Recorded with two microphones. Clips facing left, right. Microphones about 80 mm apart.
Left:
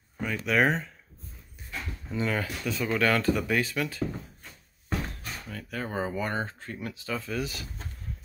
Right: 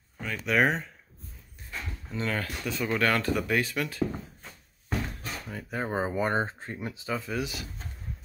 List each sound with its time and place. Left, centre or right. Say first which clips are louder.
0.2 s speech: even; centre
5.5 s speech: right 3 dB; right